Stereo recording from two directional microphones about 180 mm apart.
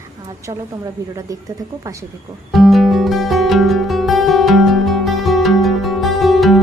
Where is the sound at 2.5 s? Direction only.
Centre (ahead or behind).